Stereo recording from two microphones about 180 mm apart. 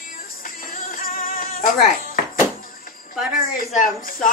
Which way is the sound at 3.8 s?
45° left (ahead or behind).